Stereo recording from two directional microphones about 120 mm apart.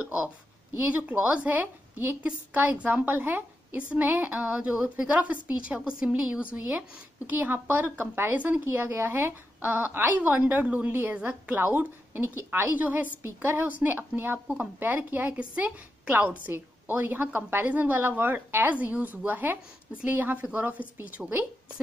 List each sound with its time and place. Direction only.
0.7 s a woman's voice: 15° right (ahead or behind)